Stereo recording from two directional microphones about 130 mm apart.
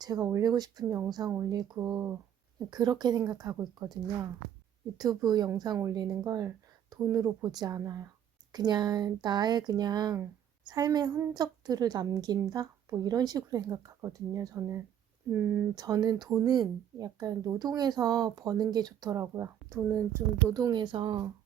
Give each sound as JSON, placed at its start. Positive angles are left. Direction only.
{"t": 0.0, "sound": "a woman's voice", "side_deg": -30}
{"t": 15.7, "sound": "speech", "side_deg": -30}